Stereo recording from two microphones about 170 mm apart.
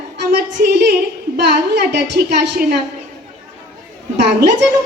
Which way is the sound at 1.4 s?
90° right.